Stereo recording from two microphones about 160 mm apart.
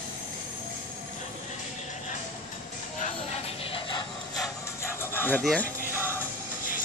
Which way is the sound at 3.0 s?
40° left (ahead or behind).